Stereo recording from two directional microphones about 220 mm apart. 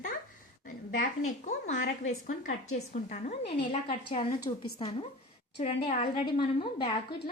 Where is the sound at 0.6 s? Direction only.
40° left (ahead or behind).